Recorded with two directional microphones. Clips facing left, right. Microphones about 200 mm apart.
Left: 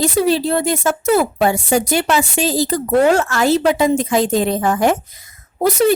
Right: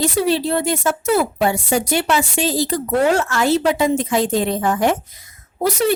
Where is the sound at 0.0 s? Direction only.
40° left (ahead or behind).